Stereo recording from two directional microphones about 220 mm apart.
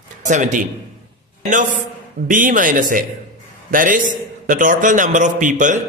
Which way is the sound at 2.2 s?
35° right (ahead or behind).